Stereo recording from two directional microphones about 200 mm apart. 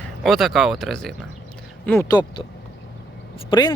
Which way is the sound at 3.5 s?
20° left (ahead or behind).